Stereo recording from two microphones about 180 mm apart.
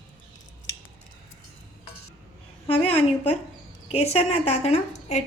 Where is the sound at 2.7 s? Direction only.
30° left (ahead or behind).